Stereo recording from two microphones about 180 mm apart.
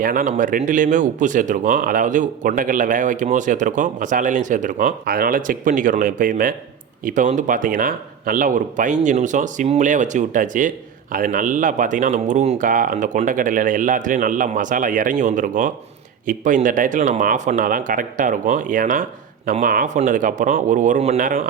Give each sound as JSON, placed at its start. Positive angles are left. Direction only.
{"t": 0.0, "sound": "speech", "side_deg": -50}